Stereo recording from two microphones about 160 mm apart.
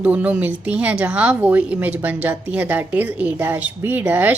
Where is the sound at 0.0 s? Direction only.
10° right (ahead or behind).